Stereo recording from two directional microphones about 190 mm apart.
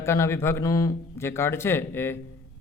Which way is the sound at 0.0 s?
15° left (ahead or behind).